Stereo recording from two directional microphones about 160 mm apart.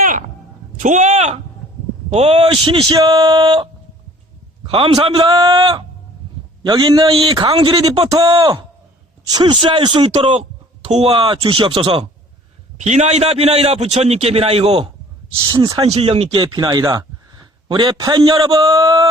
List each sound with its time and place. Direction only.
0.0 s a sound: 55° right (ahead or behind)
0.8 s a man's voice: 50° right (ahead or behind); by 12.0 s 35° right (ahead or behind)
12.7 s a man's voice: 45° right (ahead or behind)
15.4 s a man's voice: 25° right (ahead or behind)
15.8 s a man's voice: 40° right (ahead or behind); by 19.0 s 25° right (ahead or behind)